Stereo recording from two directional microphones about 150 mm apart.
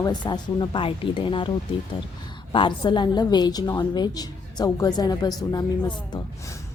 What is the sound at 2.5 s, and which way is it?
A woman's voice, 35° left (ahead or behind).